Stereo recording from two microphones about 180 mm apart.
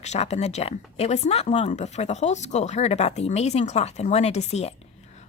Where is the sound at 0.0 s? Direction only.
40° left (ahead or behind).